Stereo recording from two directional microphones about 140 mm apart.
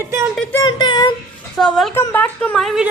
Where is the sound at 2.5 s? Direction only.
Centre (ahead or behind).